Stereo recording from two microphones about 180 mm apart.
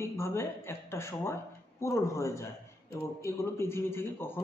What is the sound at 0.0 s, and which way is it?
A man's voice, 15° left (ahead or behind).